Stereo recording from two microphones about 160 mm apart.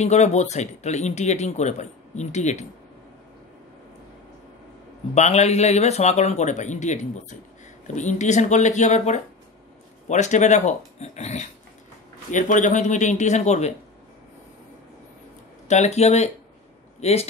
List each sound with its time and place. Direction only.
0.0 s speech: 45° left (ahead or behind)
5.1 s speech: 45° left (ahead or behind)
15.7 s a man's voice: 45° left (ahead or behind)